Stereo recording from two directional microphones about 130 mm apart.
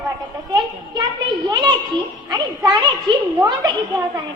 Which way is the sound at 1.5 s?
35° right (ahead or behind).